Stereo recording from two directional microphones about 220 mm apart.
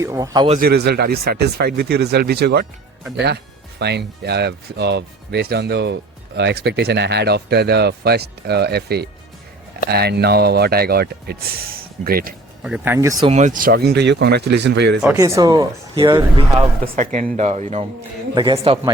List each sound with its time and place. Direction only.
0.0 s speech: 15° right (ahead or behind)
0.6 s speech: 50° right (ahead or behind)
3.8 s speech: 50° right (ahead or behind)
12.6 s speech: 5° right (ahead or behind)
13.3 s speech: 35° right (ahead or behind); by 15.0 s 50° right (ahead or behind)
15.1 s speech: 15° right (ahead or behind)
16.8 s a man's voice: 35° right (ahead or behind)